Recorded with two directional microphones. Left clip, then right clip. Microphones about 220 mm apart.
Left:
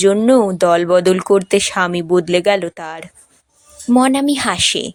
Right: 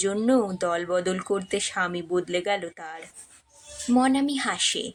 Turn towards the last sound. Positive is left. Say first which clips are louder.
# left 10 dB
turn(degrees=40)  # may be behind; listen again after turning